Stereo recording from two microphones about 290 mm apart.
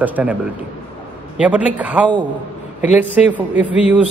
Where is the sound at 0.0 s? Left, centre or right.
Centre.